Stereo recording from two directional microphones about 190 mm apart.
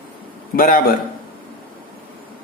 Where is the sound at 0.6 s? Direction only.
50° left (ahead or behind).